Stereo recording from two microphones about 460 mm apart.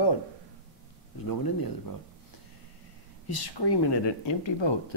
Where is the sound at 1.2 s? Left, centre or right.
Left.